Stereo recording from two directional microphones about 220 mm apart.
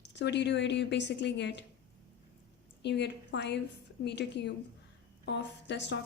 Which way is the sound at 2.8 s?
50° left (ahead or behind).